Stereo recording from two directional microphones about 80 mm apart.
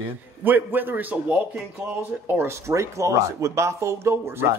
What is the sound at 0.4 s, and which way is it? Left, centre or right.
Speech, right.